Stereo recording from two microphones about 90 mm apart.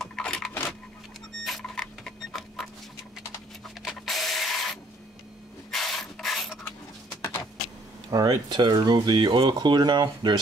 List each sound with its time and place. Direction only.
0.0 s a sound: 10° left (ahead or behind)
1.4 s printer: 5° left (ahead or behind)
3.8 s rub: centre (ahead or behind)
5.7 s mechanisms: 5° left (ahead or behind)
8.1 s speech: 45° right (ahead or behind)